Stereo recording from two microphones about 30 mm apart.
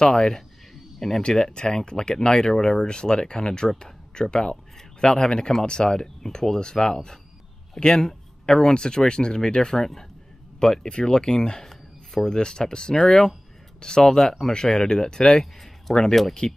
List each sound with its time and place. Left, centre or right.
0.0 s speech: left
0.9 s speech: centre
1.5 s speech: left
2.9 s speech: left